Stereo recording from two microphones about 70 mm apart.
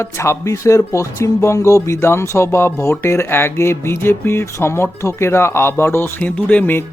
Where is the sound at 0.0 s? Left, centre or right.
Left.